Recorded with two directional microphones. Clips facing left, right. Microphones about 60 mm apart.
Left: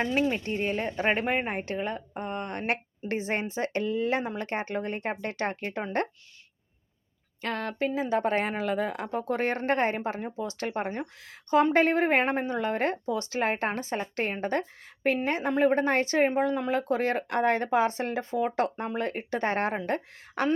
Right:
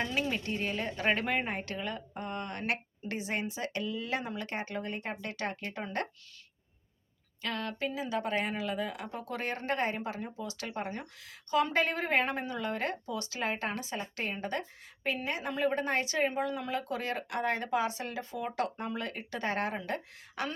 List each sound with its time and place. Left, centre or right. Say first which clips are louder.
0.0 s speech: left 6 dB; left
7.4 s speech: left 5 dB; left